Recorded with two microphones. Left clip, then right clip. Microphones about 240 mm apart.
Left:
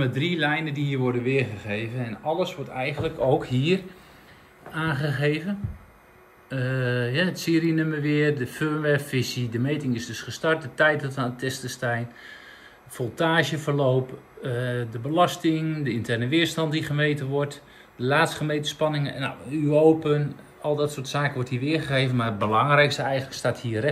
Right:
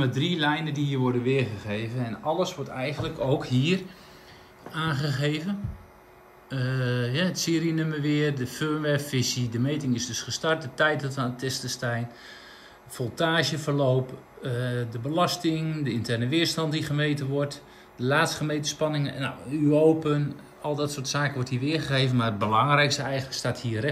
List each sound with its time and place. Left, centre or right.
0.0 s speech: centre
1.2 s speech: right
1.7 s speech: centre
6.5 s speech: centre
20.7 s speech: centre
21.2 s speech: centre
23.1 s speech: left